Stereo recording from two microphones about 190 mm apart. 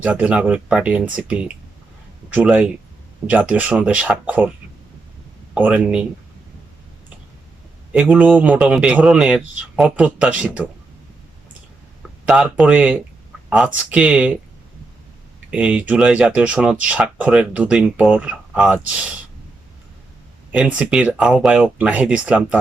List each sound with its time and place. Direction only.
0.0 s speech: 5° right (ahead or behind)
5.5 s speech: 10° right (ahead or behind)
7.9 s speech: 10° right (ahead or behind)
12.2 s speech: 5° right (ahead or behind)
15.4 s speech: 5° right (ahead or behind)
20.5 s speech: 5° right (ahead or behind)